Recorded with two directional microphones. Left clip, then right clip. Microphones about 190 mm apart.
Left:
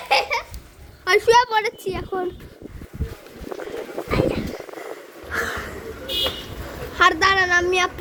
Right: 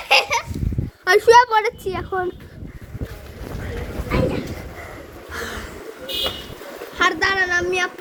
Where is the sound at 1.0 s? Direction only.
10° right (ahead or behind).